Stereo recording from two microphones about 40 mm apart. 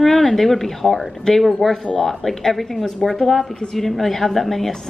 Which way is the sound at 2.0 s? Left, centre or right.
Centre.